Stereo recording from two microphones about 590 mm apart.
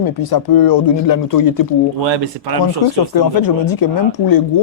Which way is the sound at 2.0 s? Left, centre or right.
Right.